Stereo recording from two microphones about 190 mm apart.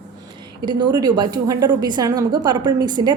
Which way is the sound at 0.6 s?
25° right (ahead or behind).